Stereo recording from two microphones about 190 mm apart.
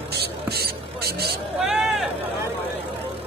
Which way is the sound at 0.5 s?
55° right (ahead or behind).